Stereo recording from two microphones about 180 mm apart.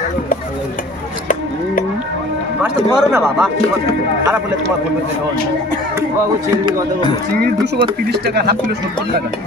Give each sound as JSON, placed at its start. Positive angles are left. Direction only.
{"t": 3.0, "sound": "speech", "side_deg": -5}
{"t": 8.1, "sound": "speech", "side_deg": -65}